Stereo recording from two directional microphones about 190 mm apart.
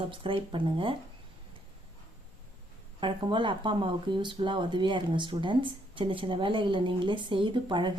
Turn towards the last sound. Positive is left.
turn(degrees=-25)  # may be behind; listen again after turning